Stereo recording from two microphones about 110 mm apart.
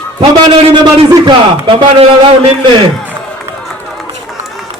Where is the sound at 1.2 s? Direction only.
45° right (ahead or behind).